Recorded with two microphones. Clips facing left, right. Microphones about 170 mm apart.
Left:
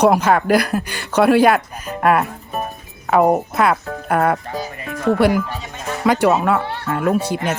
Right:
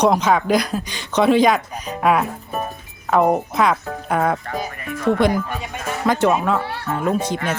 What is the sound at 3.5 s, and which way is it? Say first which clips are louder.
Speech: left 1 dB; 5° left (ahead or behind).